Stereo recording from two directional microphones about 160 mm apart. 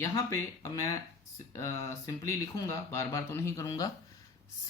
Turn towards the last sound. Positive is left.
turn(degrees=20)  # may be behind; listen again after turning